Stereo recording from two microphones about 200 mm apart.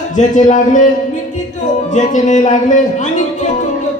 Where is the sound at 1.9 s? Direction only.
40° left (ahead or behind).